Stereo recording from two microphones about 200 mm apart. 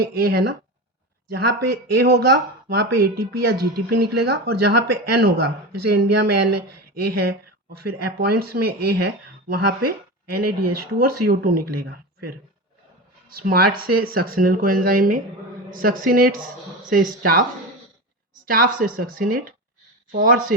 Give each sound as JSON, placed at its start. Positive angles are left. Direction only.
{"t": 0.0, "sound": "speech", "side_deg": -50}
{"t": 13.3, "sound": "speech", "side_deg": -50}
{"t": 18.4, "sound": "speech", "side_deg": -45}